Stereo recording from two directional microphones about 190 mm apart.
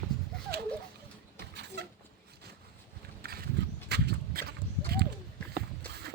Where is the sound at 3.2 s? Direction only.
55° right (ahead or behind).